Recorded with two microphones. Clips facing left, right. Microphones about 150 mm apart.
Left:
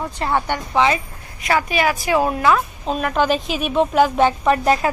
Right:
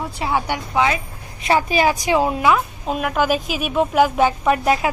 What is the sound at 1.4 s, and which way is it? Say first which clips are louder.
A woman's voice: right 2 dB; 30° right (ahead or behind).